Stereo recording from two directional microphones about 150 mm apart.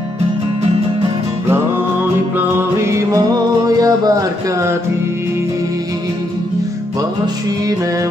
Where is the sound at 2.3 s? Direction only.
15° right (ahead or behind).